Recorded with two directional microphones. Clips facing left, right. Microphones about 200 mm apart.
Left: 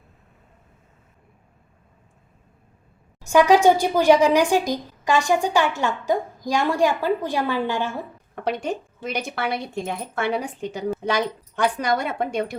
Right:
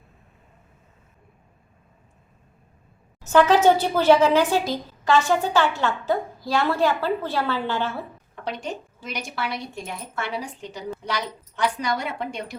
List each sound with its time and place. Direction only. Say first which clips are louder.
3.2 s a woman's voice: left 1 dB; 10° left (ahead or behind)
8.4 s speech: left 5 dB; 55° left (ahead or behind)